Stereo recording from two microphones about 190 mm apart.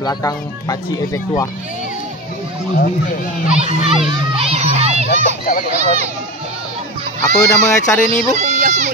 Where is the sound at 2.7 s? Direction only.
45° left (ahead or behind).